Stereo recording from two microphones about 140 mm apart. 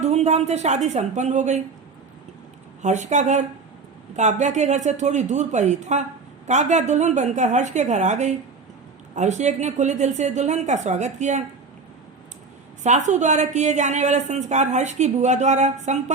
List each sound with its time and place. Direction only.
0.0 s a woman's voice: 50° right (ahead or behind)
2.8 s a woman's voice: 55° right (ahead or behind)
12.8 s a woman's voice: 55° right (ahead or behind)